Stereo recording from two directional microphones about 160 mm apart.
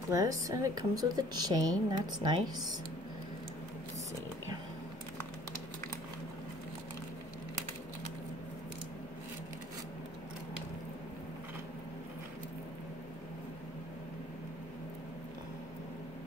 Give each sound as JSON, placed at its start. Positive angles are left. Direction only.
{"t": 0.1, "sound": "a woman's voice", "side_deg": -20}